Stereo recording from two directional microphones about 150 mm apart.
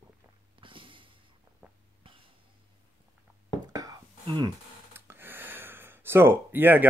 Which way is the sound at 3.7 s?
25° right (ahead or behind).